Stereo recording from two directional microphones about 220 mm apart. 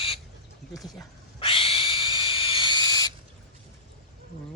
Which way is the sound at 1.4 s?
25° left (ahead or behind).